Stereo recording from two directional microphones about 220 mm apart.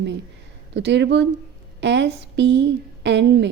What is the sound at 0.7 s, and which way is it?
Speech, 50° right (ahead or behind).